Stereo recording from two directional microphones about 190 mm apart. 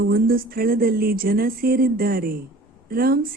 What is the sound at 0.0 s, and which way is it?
Speech, 50° right (ahead or behind).